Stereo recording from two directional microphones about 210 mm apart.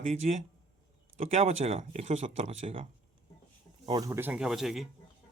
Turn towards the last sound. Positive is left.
turn(degrees=0)  # may be behind; listen again after turning